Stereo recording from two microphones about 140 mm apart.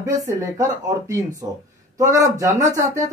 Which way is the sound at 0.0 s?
25° right (ahead or behind).